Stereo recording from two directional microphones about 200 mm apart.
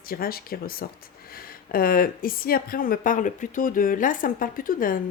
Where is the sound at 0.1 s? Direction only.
50° left (ahead or behind).